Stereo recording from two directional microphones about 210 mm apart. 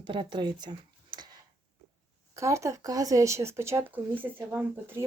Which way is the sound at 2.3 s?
15° right (ahead or behind).